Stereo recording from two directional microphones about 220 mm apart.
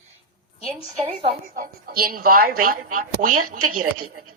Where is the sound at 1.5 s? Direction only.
40° right (ahead or behind).